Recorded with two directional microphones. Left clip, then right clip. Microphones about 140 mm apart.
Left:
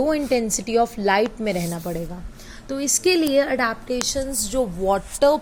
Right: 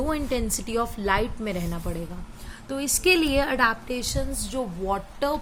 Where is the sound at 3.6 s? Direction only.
25° left (ahead or behind).